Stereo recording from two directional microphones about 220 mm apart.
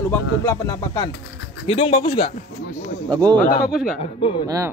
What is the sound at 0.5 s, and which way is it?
Speech, 15° left (ahead or behind).